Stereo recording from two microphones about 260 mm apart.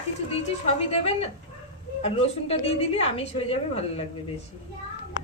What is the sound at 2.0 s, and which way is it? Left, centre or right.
A woman's voice, left.